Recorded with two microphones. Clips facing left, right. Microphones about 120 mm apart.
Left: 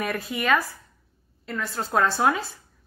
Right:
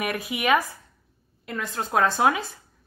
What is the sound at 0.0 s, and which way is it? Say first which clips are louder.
A woman's voice: right 1 dB; 15° right (ahead or behind).